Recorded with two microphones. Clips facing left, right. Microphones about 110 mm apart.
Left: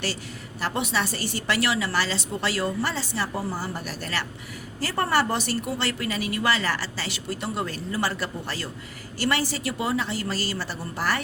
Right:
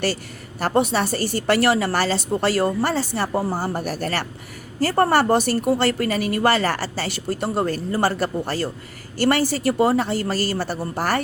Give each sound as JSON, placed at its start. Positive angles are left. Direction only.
{"t": 0.6, "sound": "a woman's voice", "side_deg": -40}